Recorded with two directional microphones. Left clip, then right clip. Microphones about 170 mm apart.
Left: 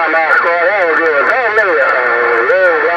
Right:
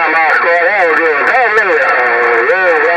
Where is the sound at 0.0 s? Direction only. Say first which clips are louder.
Right 1 dB; 50° right (ahead or behind).